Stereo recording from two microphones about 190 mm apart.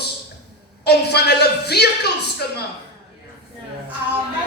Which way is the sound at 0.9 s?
60° left (ahead or behind).